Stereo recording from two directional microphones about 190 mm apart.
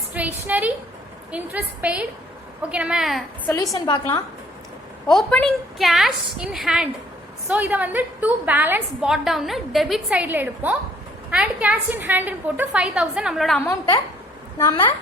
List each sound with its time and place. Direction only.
0.1 s a woman's voice: 10° right (ahead or behind)
3.5 s a woman's voice: 20° left (ahead or behind)
5.0 s a woman's voice: 5° left (ahead or behind)
13.6 s a woman's voice: 15° left (ahead or behind)